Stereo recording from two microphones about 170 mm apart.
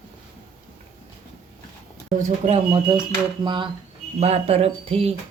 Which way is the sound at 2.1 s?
40° right (ahead or behind).